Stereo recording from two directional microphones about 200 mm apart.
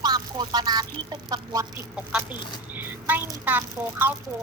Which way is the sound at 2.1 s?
5° right (ahead or behind).